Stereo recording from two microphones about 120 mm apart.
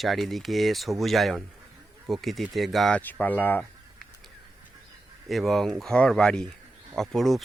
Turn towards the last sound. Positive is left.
turn(degrees=0)  # may be behind; listen again after turning